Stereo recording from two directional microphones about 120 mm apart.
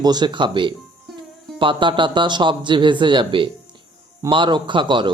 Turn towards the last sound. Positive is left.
turn(degrees=-40)  # may be behind; listen again after turning